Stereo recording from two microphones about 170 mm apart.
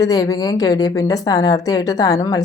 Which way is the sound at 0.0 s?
20° left (ahead or behind).